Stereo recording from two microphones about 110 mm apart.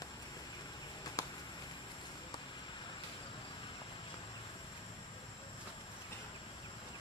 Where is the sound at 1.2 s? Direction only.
35° left (ahead or behind).